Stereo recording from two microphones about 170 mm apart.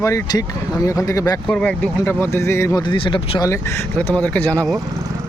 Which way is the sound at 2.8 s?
30° left (ahead or behind).